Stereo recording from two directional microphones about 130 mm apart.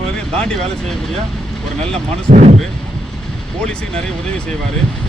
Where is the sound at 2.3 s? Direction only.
65° right (ahead or behind).